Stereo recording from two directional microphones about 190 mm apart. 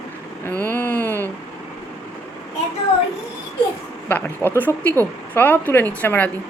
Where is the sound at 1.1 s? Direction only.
15° right (ahead or behind).